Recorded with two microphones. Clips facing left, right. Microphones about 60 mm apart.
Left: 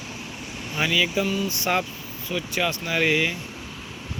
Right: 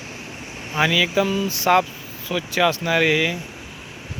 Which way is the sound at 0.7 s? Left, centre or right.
Right.